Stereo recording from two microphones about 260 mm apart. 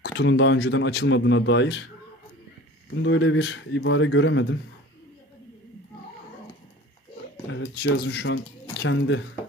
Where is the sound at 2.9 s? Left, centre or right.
Left.